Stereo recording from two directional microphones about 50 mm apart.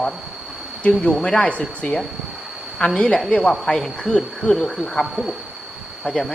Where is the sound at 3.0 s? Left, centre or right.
Centre.